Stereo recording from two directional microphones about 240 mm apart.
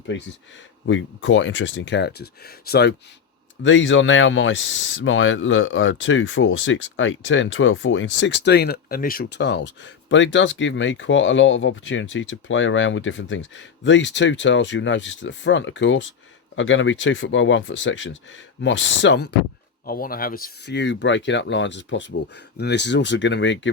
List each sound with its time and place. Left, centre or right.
0.9 s speech: left
19.8 s speech: left